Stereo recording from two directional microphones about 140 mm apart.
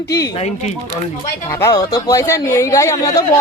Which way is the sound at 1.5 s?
20° left (ahead or behind).